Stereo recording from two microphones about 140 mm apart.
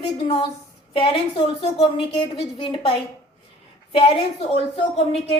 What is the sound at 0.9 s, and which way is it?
Speech, 40° left (ahead or behind).